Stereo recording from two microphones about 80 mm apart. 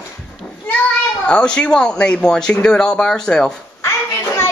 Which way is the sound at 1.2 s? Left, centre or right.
Centre.